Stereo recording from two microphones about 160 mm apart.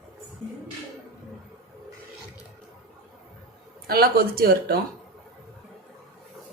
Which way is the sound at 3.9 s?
75° right (ahead or behind).